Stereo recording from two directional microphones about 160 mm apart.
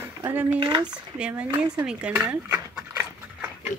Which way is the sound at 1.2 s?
10° right (ahead or behind).